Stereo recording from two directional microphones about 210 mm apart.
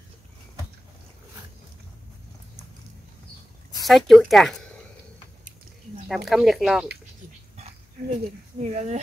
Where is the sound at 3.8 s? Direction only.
Centre (ahead or behind).